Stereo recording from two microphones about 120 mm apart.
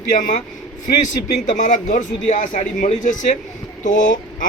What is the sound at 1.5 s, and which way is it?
A man's voice, 90° left.